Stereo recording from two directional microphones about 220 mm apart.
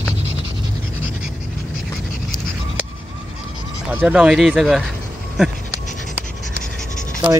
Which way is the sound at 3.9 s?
5° right (ahead or behind).